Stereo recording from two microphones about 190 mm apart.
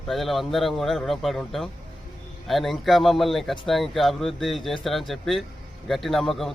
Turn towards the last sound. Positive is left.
turn(degrees=0)  # may be behind; listen again after turning